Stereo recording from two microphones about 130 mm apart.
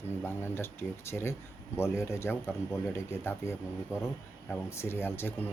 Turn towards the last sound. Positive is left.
turn(degrees=15)  # may be behind; listen again after turning